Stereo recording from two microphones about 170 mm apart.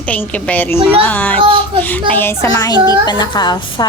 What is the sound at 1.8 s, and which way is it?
A woman's voice, 10° left (ahead or behind).